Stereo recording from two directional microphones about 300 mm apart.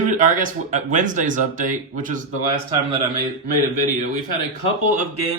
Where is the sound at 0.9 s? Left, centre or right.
Right.